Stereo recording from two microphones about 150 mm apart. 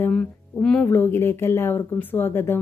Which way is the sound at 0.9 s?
15° left (ahead or behind).